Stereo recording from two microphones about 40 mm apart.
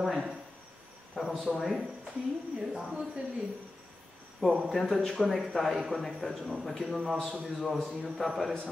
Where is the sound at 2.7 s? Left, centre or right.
Centre.